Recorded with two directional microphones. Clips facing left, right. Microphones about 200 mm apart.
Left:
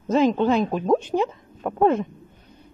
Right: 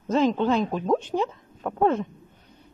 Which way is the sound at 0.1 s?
10° left (ahead or behind).